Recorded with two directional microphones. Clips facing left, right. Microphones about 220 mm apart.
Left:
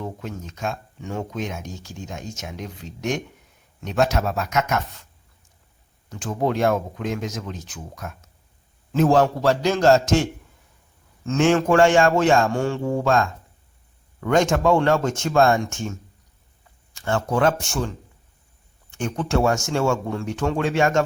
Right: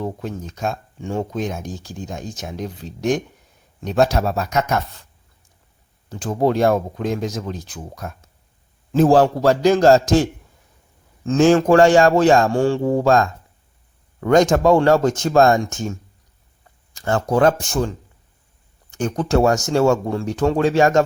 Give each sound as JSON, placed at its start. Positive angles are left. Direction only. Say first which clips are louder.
{"t": 0.0, "sound": "speech", "louder": "right 5 dB", "side_deg": -35}
{"t": 6.1, "sound": "speech", "louder": "right 5 dB", "side_deg": -35}